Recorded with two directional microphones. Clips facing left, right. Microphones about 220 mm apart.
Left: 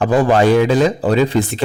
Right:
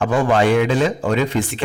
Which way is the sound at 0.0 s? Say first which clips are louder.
Left 3 dB; 35° left (ahead or behind).